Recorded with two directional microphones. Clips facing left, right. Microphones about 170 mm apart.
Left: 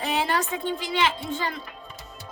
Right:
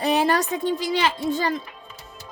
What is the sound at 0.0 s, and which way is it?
A woman's voice, 40° right (ahead or behind).